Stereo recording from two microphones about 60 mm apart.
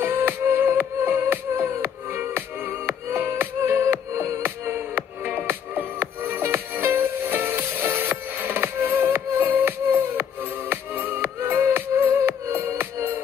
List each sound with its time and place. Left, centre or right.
0.0 s music: right